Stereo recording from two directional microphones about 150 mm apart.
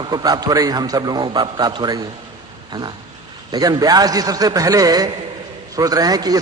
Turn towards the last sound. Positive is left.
turn(degrees=-25)  # may be behind; listen again after turning